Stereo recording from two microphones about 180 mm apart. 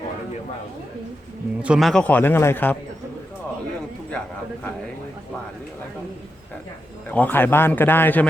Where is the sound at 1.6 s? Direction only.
5° right (ahead or behind).